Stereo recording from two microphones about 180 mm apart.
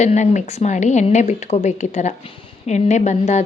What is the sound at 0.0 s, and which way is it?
A woman's voice, 40° left (ahead or behind).